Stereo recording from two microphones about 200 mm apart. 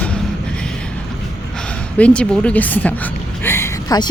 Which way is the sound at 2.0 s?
5° left (ahead or behind).